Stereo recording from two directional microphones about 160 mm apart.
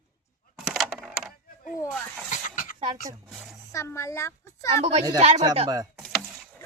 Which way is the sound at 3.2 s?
5° right (ahead or behind).